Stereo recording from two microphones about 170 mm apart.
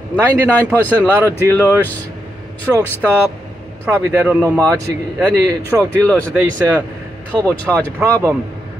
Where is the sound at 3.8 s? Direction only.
15° right (ahead or behind).